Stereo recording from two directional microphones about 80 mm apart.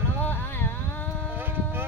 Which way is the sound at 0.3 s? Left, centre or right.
Left.